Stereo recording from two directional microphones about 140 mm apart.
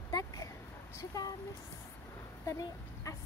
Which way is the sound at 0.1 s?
25° left (ahead or behind).